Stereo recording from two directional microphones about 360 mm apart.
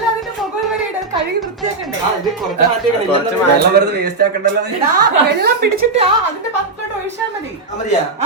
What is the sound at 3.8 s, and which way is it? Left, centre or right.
A man's voice, right.